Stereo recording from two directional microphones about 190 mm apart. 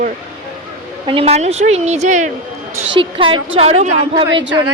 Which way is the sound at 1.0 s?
30° right (ahead or behind).